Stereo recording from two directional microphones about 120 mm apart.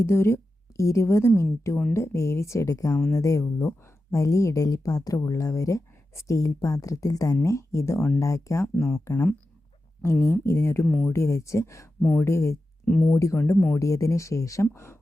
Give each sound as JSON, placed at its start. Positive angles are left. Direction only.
{"t": 0.0, "sound": "speech", "side_deg": 20}
{"t": 8.7, "sound": "speech", "side_deg": 5}
{"t": 10.0, "sound": "speech", "side_deg": 20}
{"t": 12.8, "sound": "speech", "side_deg": 5}
{"t": 13.1, "sound": "speech", "side_deg": 25}
{"t": 13.4, "sound": "speech", "side_deg": 15}
{"t": 13.7, "sound": "speech", "side_deg": 25}